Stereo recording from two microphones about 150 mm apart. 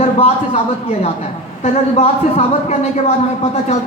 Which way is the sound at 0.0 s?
40° left (ahead or behind).